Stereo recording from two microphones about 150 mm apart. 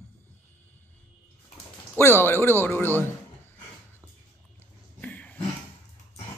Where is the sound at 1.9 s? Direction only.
15° left (ahead or behind).